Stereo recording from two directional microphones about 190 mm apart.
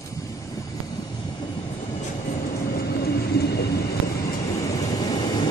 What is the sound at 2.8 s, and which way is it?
Train, 50° left (ahead or behind).